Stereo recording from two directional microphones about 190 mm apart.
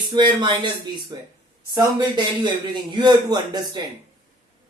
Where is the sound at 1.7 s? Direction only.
25° right (ahead or behind).